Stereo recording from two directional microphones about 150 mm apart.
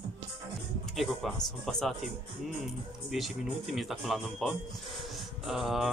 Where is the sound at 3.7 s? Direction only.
Centre (ahead or behind).